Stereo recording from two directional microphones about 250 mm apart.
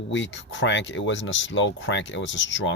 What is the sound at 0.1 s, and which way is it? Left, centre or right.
Speech, left.